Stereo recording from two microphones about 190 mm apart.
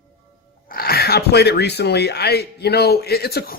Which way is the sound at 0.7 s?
55° left (ahead or behind).